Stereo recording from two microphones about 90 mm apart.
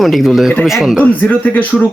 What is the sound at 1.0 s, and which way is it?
Speech, 20° left (ahead or behind).